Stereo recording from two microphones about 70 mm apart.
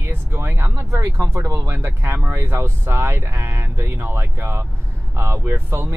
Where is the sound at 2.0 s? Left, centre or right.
Right.